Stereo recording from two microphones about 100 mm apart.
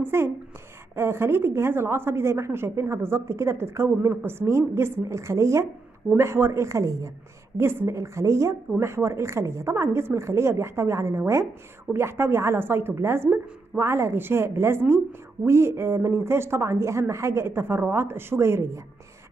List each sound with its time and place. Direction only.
0.0 s a woman's voice: 25° right (ahead or behind)